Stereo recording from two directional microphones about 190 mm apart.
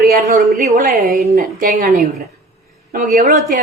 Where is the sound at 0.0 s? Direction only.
45° right (ahead or behind).